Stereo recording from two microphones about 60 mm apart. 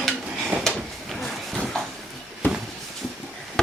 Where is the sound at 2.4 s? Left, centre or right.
Left.